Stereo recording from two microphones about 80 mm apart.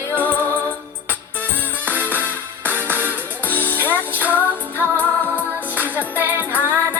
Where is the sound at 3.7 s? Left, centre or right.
Right.